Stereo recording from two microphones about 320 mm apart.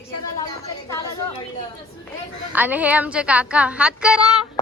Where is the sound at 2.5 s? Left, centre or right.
Centre.